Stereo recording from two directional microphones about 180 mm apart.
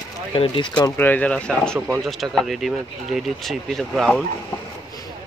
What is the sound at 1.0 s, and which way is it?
Speech, 10° left (ahead or behind).